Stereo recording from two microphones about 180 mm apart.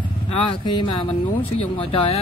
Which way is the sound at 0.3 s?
25° left (ahead or behind).